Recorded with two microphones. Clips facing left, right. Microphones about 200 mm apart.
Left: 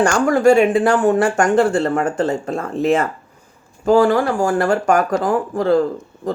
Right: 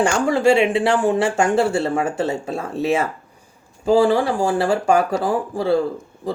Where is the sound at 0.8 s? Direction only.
10° right (ahead or behind).